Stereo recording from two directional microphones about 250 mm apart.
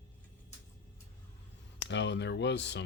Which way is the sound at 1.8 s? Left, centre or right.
Left.